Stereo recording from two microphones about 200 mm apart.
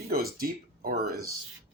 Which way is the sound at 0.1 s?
50° right (ahead or behind).